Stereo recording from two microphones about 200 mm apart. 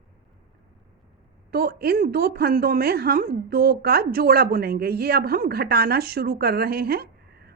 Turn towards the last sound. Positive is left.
turn(degrees=-50)  # may be behind; listen again after turning